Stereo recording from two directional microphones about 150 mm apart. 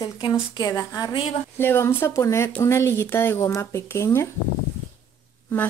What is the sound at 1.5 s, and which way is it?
Speech, 15° left (ahead or behind).